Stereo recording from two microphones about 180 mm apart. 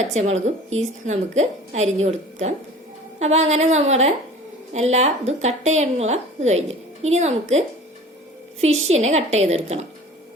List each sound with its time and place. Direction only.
0.1 s a woman's voice: 40° right (ahead or behind)
8.6 s a woman's voice: 40° right (ahead or behind)